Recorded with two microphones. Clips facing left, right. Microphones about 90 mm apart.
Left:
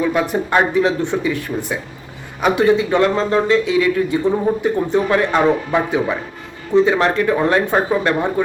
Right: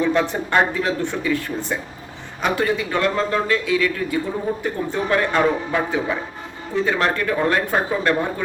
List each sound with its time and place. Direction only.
0.0 s speech: 10° left (ahead or behind)